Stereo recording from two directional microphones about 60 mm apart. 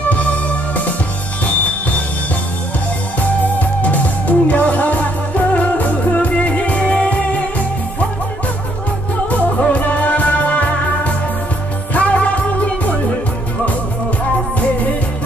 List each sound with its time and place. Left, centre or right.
0.1 s music: left
3.2 s music: left
9.3 s music: left
11.9 s music: left